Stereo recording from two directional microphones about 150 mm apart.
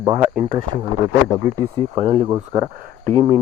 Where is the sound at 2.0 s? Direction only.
40° right (ahead or behind).